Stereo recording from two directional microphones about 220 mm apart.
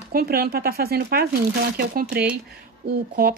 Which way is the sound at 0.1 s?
45° right (ahead or behind).